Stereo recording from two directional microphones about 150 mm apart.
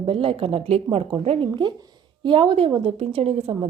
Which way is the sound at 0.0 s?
35° right (ahead or behind).